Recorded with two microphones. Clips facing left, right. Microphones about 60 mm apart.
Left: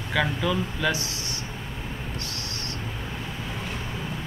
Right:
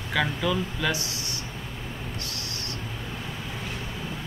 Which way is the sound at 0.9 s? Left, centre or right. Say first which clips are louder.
Left 1 dB; left.